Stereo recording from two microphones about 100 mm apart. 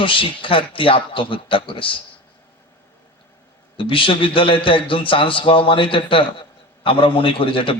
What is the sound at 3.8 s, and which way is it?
A man's voice, 60° left (ahead or behind).